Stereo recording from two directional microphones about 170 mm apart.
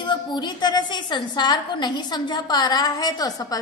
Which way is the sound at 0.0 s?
25° left (ahead or behind).